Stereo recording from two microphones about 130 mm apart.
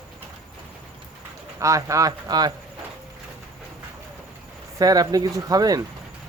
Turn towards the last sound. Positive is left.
turn(degrees=-30)  # may be behind; listen again after turning